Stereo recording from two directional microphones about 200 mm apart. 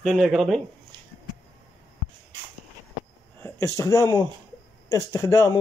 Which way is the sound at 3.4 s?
15° left (ahead or behind).